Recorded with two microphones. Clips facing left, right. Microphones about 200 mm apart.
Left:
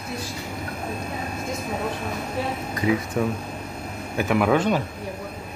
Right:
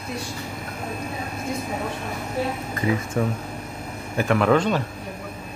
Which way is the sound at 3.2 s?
5° left (ahead or behind).